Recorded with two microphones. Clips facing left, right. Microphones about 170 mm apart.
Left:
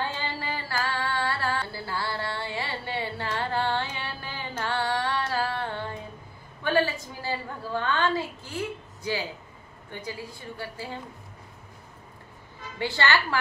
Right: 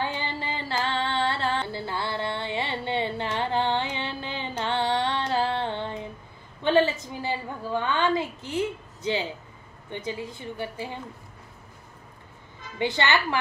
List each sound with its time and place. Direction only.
0.1 s music: 20° right (ahead or behind)
6.6 s a sound: 20° right (ahead or behind)
9.8 s a woman's voice: 20° right (ahead or behind)
12.7 s a woman's voice: 20° right (ahead or behind)